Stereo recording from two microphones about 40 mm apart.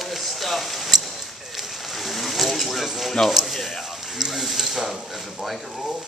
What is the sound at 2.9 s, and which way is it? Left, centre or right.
Speech, centre.